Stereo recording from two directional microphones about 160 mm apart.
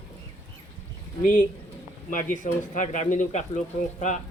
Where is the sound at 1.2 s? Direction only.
55° left (ahead or behind).